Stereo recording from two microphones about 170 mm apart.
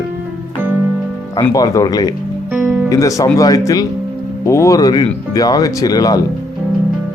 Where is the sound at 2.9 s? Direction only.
20° left (ahead or behind).